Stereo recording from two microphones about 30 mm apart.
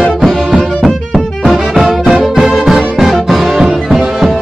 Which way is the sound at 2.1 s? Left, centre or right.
Centre.